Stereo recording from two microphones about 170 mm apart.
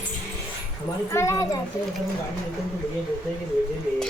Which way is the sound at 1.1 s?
15° left (ahead or behind).